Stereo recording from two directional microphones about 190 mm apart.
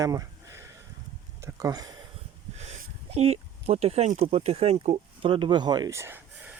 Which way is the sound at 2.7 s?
35° right (ahead or behind).